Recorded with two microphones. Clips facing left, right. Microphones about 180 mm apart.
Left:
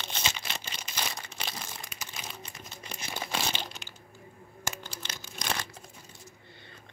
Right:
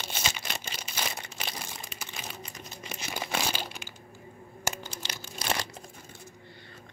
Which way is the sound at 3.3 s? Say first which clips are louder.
Right 2 dB; 10° right (ahead or behind).